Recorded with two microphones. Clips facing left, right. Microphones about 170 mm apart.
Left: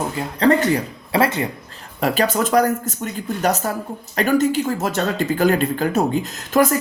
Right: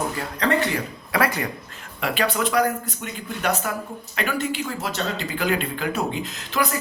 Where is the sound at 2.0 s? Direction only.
40° left (ahead or behind).